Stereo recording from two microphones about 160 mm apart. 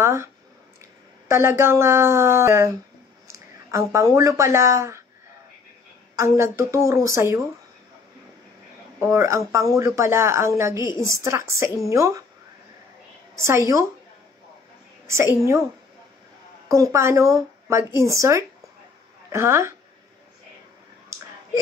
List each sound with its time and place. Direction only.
0.0 s a sound: 15° right (ahead or behind)
1.3 s a woman's voice: 15° right (ahead or behind)
6.1 s a woman's voice: 15° right (ahead or behind)
9.0 s a woman's voice: 15° right (ahead or behind)
13.4 s speech: 20° right (ahead or behind)
15.0 s a woman's voice: 15° right (ahead or behind)
16.6 s a woman's voice: 20° right (ahead or behind)